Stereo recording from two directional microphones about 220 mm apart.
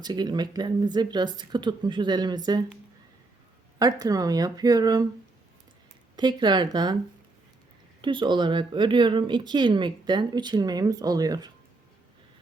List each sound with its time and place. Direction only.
0.0 s speech: 20° right (ahead or behind)
3.8 s speech: 15° right (ahead or behind)
6.1 s speech: 20° right (ahead or behind)
8.0 s speech: 20° right (ahead or behind)